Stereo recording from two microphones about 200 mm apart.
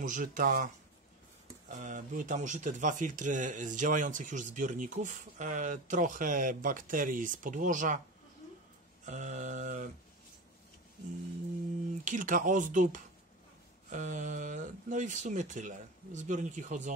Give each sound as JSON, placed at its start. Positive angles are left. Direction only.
{"t": 0.0, "sound": "speech", "side_deg": -40}
{"t": 1.7, "sound": "speech", "side_deg": -40}
{"t": 9.0, "sound": "mantra", "side_deg": -40}
{"t": 12.0, "sound": "speech", "side_deg": -40}